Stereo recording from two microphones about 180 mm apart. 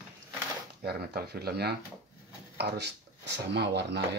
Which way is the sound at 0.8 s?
60° right (ahead or behind).